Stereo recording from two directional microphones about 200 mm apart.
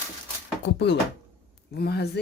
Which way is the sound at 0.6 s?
60° left (ahead or behind).